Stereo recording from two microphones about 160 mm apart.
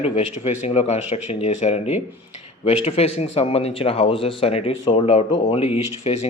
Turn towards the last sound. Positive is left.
turn(degrees=40)  # may be behind; listen again after turning